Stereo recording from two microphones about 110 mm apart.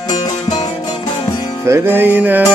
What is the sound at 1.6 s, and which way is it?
Music, 20° right (ahead or behind).